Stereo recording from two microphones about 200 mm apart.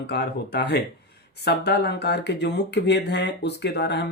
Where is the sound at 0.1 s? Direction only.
55° left (ahead or behind).